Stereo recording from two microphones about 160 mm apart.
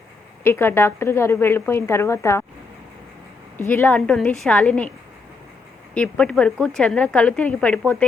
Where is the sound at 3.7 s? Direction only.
10° left (ahead or behind).